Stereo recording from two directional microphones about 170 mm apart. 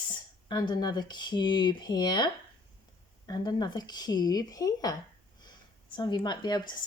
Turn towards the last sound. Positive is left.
turn(degrees=25)  # may be behind; listen again after turning